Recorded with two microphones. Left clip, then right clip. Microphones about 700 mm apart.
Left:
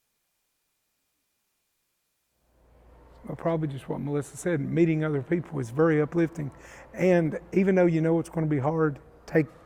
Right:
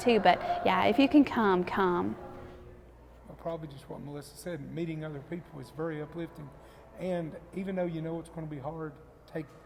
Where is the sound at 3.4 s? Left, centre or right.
Left.